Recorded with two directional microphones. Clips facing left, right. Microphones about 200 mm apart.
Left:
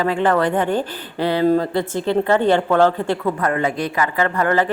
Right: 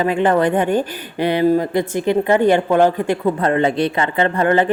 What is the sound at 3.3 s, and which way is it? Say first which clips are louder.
A woman's voice: right 4 dB; 30° right (ahead or behind).